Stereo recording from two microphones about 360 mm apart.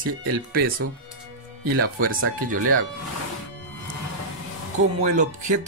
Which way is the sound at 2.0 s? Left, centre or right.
Right.